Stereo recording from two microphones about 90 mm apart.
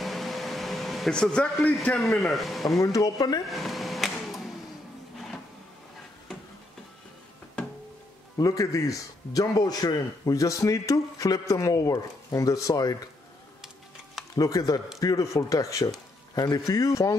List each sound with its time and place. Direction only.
0.0 s air conditioning: centre (ahead or behind)
2.1 s speech: centre (ahead or behind)
2.8 s speech: 40° left (ahead or behind)
3.4 s a sound: centre (ahead or behind)
8.4 s a man's voice: 40° left (ahead or behind)
14.3 s a man's voice: 40° left (ahead or behind)